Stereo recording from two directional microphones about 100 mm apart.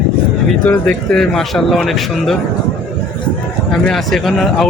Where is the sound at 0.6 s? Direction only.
20° left (ahead or behind).